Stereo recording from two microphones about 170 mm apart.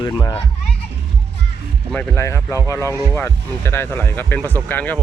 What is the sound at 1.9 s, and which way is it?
Speech, 10° left (ahead or behind).